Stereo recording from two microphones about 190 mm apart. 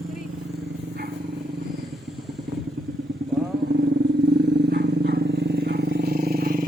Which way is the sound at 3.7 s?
60° right (ahead or behind).